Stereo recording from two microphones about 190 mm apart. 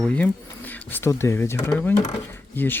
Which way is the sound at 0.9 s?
15° left (ahead or behind).